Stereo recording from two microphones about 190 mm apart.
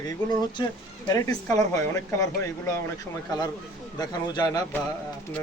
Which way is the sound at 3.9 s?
20° left (ahead or behind).